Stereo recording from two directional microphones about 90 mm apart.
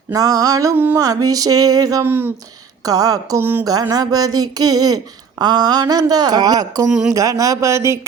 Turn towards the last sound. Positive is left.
turn(degrees=-30)  # may be behind; listen again after turning